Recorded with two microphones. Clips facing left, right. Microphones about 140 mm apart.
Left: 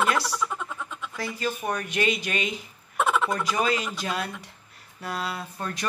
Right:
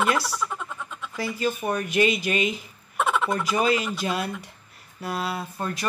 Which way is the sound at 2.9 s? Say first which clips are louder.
Even; centre (ahead or behind).